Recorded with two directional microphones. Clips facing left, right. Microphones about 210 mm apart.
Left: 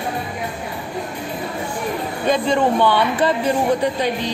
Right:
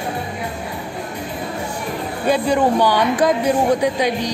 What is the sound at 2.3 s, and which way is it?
A woman's voice, 10° right (ahead or behind).